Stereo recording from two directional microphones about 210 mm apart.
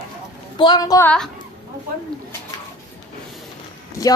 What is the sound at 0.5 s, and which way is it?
Speech, 20° left (ahead or behind).